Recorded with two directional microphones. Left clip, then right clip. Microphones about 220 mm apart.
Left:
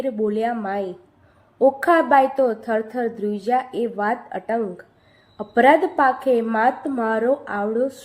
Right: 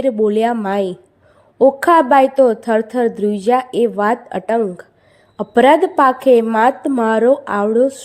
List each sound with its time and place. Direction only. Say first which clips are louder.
0.0 s a woman's voice: right 8 dB; 40° right (ahead or behind)